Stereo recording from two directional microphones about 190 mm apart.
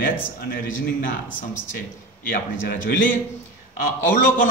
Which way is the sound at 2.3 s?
50° left (ahead or behind).